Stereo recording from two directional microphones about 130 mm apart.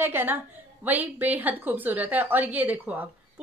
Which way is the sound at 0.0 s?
15° right (ahead or behind).